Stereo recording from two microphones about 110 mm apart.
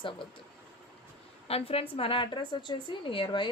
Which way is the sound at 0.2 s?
50° left (ahead or behind).